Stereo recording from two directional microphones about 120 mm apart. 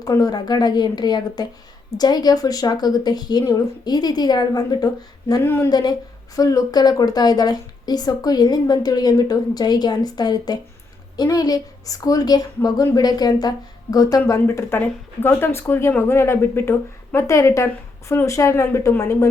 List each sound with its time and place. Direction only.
0.0 s a woman's voice: 30° left (ahead or behind)